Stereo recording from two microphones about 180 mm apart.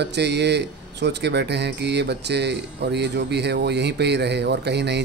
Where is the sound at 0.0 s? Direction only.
70° right (ahead or behind).